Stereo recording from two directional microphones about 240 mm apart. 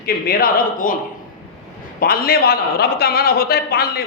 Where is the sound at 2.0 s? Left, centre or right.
Left.